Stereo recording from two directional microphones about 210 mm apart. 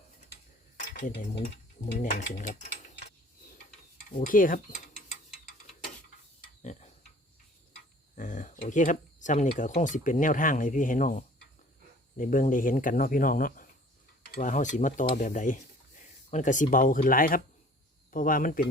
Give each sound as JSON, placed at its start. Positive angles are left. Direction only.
{"t": 0.9, "sound": "speech", "side_deg": 40}
{"t": 4.1, "sound": "speech", "side_deg": 40}
{"t": 6.6, "sound": "tick-tock", "side_deg": 35}
{"t": 8.1, "sound": "a sound", "side_deg": 35}
{"t": 8.5, "sound": "speech", "side_deg": 40}
{"t": 14.3, "sound": "a sound", "side_deg": 40}
{"t": 18.1, "sound": "speech", "side_deg": 40}